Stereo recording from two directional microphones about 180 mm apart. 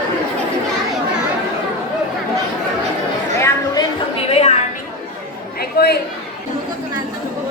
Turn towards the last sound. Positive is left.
turn(degrees=60)  # may be behind; listen again after turning